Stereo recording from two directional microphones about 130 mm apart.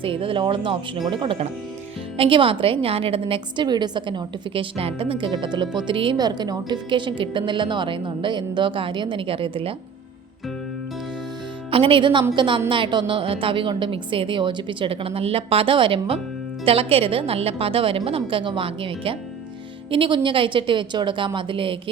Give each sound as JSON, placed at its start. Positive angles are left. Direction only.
{"t": 0.0, "sound": "a woman's voice", "side_deg": -45}
{"t": 11.7, "sound": "a woman's voice", "side_deg": -40}